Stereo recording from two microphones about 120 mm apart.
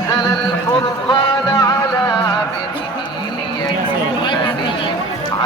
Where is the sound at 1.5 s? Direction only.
30° left (ahead or behind).